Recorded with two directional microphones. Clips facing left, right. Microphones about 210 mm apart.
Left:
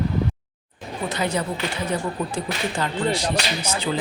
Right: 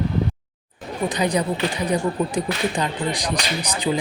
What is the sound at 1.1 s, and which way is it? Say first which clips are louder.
Speech: right 3 dB; 15° right (ahead or behind).